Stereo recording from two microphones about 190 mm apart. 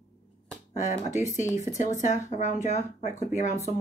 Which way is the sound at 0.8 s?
40° left (ahead or behind).